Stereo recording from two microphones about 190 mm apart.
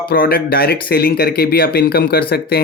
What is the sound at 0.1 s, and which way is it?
Speech, 50° left (ahead or behind).